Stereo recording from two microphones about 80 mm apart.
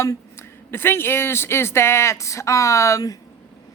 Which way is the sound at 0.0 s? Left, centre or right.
Left.